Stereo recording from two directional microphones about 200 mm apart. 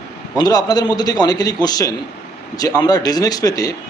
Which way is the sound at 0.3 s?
20° left (ahead or behind).